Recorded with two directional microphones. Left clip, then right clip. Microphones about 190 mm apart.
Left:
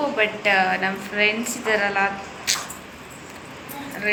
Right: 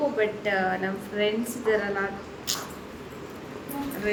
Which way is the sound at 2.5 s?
20° right (ahead or behind).